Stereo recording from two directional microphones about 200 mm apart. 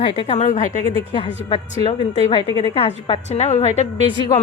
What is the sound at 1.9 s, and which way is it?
A woman's voice, 25° left (ahead or behind).